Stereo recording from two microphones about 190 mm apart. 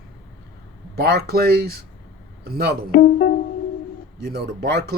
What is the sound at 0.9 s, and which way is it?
Speech, 55° right (ahead or behind).